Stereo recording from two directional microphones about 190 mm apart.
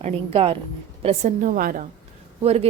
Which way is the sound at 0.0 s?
30° right (ahead or behind).